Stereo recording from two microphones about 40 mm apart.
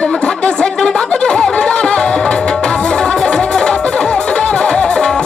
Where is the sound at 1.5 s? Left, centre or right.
Left.